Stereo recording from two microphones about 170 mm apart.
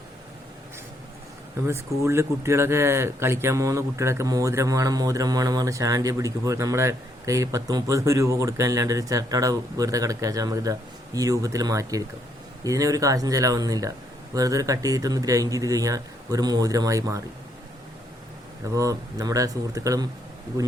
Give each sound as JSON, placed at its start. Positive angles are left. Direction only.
{"t": 2.0, "sound": "speech", "side_deg": -15}
{"t": 18.6, "sound": "speech", "side_deg": -20}